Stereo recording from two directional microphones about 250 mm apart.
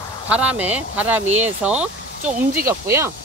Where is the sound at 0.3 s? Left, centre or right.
Centre.